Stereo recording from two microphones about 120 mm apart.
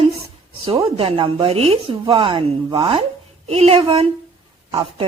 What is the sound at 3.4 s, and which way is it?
Speech, 60° right (ahead or behind).